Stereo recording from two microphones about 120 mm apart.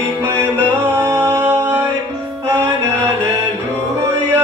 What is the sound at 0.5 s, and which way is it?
Music, 20° right (ahead or behind).